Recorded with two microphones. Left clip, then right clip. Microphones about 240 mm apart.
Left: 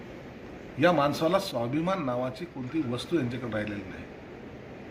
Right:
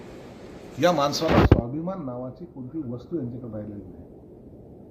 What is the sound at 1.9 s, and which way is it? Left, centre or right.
Speech, left.